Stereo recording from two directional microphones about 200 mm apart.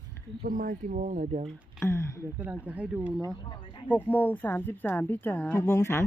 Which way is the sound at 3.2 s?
20° left (ahead or behind).